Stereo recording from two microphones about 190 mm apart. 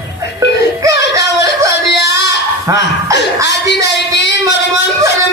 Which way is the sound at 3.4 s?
65° left (ahead or behind).